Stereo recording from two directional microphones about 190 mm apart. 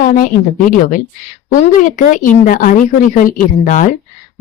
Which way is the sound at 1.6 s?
40° left (ahead or behind).